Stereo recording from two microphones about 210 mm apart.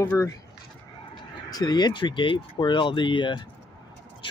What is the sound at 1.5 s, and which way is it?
Speech, 20° left (ahead or behind).